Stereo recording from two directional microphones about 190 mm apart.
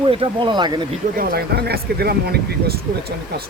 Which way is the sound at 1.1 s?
55° right (ahead or behind).